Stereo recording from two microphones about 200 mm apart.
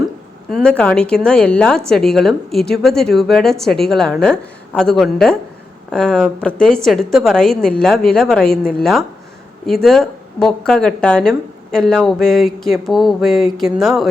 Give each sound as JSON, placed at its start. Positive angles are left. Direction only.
{"t": 0.5, "sound": "speech", "side_deg": 5}